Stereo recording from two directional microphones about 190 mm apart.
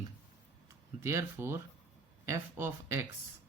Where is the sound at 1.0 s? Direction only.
15° right (ahead or behind).